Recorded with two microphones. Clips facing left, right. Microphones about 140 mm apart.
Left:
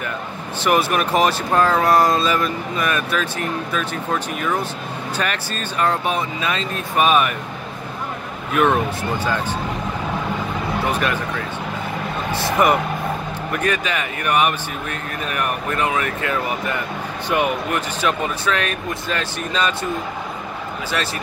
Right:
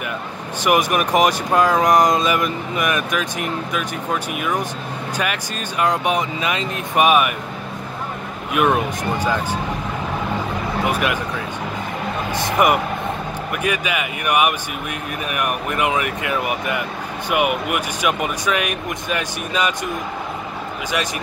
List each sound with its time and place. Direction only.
0.7 s speech: 15° right (ahead or behind)
8.5 s speech: 10° right (ahead or behind)
10.9 s speech: 10° right (ahead or behind)
12.3 s vehicle: 15° right (ahead or behind)
13.5 s speech: 10° right (ahead or behind)